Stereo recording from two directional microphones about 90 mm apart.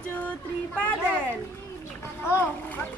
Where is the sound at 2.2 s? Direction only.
20° left (ahead or behind).